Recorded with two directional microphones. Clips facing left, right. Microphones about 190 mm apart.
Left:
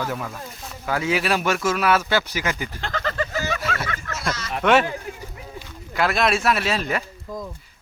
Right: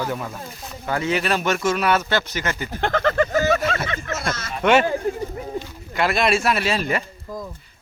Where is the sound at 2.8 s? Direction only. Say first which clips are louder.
Right 8 dB; 55° right (ahead or behind).